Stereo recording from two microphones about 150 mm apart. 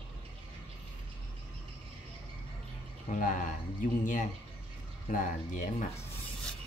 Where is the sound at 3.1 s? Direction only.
60° left (ahead or behind).